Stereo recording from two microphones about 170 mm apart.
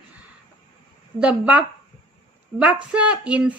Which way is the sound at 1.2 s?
5° right (ahead or behind).